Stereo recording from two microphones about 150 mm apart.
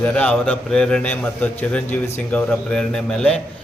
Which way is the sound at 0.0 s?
10° left (ahead or behind).